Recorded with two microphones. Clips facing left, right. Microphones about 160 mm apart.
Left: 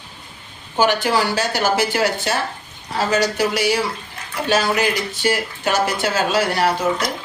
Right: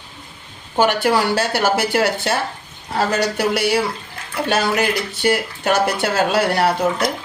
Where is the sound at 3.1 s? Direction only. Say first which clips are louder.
Left 3 dB; 60° right (ahead or behind).